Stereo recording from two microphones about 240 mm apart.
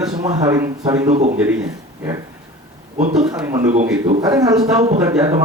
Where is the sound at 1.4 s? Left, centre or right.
Centre.